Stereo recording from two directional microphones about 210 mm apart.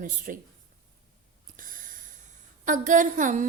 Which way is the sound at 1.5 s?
40° right (ahead or behind).